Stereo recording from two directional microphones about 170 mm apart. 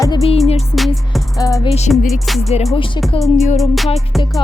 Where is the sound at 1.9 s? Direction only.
Centre (ahead or behind).